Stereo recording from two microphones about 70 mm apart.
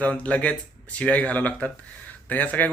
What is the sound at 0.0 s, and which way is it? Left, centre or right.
A man's voice, centre.